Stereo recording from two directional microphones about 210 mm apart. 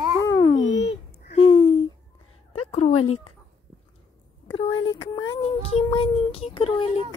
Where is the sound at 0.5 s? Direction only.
60° left (ahead or behind).